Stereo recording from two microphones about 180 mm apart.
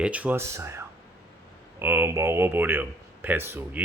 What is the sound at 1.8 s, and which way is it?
Speech, 10° right (ahead or behind).